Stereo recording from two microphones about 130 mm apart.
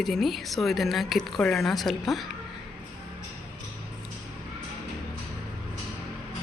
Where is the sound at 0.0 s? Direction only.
Centre (ahead or behind).